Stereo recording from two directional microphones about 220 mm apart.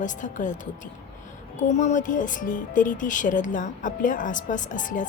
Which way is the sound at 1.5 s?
35° left (ahead or behind).